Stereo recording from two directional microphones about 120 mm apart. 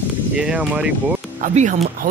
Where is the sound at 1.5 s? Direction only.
80° right.